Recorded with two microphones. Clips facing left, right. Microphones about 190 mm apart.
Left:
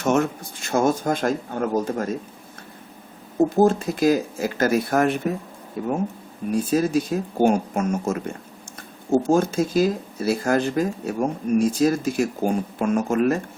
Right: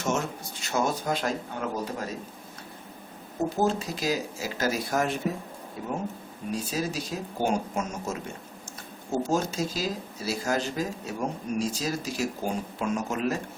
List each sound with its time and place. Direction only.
0.0 s speech: 60° left (ahead or behind)
3.5 s speech: 50° left (ahead or behind)